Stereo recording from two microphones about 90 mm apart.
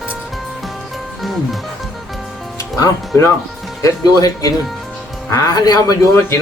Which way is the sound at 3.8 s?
40° left (ahead or behind).